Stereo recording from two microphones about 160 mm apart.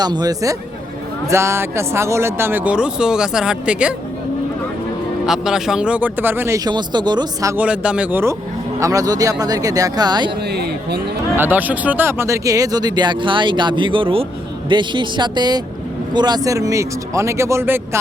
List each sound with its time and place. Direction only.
0.0 s speech: 25° right (ahead or behind); by 3.9 s 5° right (ahead or behind)
5.2 s speech: 5° right (ahead or behind)
6.7 s speech: 25° right (ahead or behind)
7.5 s speech: 5° right (ahead or behind); by 10.3 s 25° right (ahead or behind)
10.4 s speech: 90° right
11.3 s speech: 10° right (ahead or behind)